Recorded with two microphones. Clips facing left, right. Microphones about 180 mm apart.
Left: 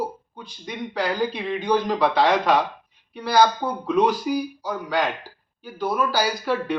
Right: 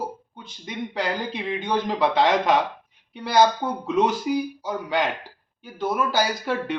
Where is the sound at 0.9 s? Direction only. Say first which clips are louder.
Left 4 dB; 25° right (ahead or behind).